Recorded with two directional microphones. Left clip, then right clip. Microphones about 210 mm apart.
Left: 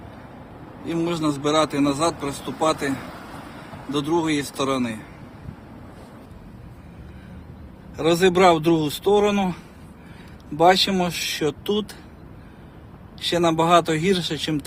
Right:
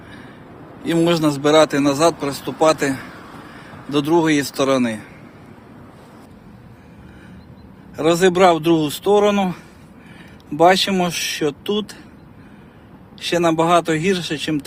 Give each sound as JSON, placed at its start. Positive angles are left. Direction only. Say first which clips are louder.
{"t": 0.9, "sound": "a man's voice", "louder": "right 7 dB", "side_deg": -35}
{"t": 3.2, "sound": "a sound", "louder": "even", "side_deg": 55}
{"t": 3.9, "sound": "a man's voice", "louder": "right 6 dB", "side_deg": -30}
{"t": 7.9, "sound": "speech", "louder": "right 3 dB", "side_deg": -15}
{"t": 10.6, "sound": "speech", "louder": "right 3 dB", "side_deg": -15}
{"t": 13.1, "sound": "speech", "louder": "right 3 dB", "side_deg": -10}